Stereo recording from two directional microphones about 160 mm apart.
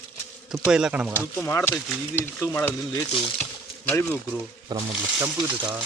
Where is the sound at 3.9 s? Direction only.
15° left (ahead or behind).